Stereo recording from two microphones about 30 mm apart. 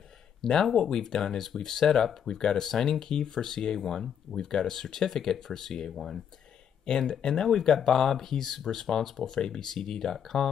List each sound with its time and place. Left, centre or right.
0.4 s speech: centre
1.4 s speech: centre
5.9 s speech: centre
6.9 s speech: left
9.2 s speech: left